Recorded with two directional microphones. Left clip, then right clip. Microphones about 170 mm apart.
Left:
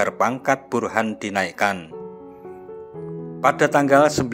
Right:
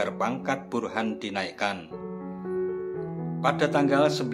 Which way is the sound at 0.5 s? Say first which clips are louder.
Left 8 dB; 45° left (ahead or behind).